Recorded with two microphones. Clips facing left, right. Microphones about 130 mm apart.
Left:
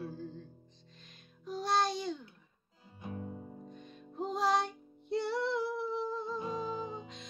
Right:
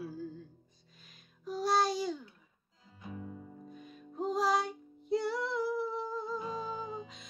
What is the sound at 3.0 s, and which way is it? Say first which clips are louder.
Music: left 2 dB; 30° left (ahead or behind).